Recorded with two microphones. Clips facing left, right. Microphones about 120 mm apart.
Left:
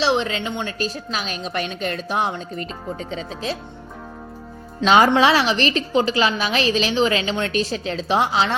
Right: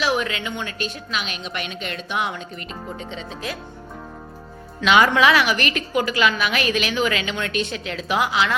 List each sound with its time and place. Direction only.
0.0 s a woman's voice: 30° left (ahead or behind)
4.8 s a woman's voice: 35° left (ahead or behind)